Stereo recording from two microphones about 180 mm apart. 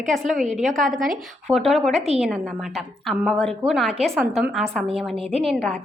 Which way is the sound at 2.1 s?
Centre (ahead or behind).